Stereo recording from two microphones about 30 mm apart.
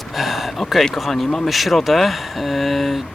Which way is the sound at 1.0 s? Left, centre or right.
Centre.